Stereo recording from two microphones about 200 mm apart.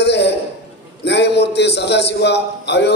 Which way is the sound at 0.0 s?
60° left (ahead or behind).